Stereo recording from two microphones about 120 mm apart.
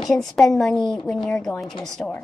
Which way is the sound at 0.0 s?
Centre (ahead or behind).